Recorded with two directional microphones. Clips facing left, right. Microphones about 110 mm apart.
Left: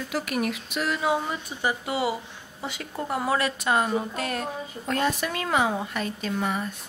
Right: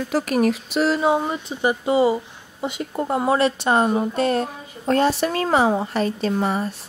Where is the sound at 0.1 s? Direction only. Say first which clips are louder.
Right 8 dB; 40° right (ahead or behind).